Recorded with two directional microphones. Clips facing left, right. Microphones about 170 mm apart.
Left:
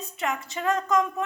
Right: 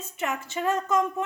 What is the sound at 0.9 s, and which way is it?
Speech, 25° right (ahead or behind).